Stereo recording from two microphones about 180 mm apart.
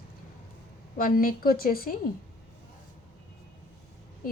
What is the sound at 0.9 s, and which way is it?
A woman's voice, 50° left (ahead or behind).